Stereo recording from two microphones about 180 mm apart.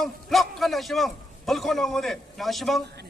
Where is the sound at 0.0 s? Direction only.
Centre (ahead or behind).